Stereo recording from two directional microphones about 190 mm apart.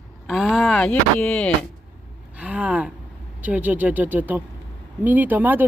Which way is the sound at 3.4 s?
10° right (ahead or behind).